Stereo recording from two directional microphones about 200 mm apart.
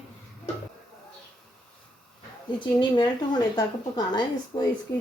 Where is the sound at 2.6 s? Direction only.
20° left (ahead or behind).